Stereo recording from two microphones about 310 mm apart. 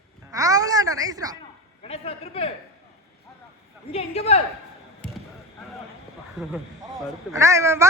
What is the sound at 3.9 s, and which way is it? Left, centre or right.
Speech, centre.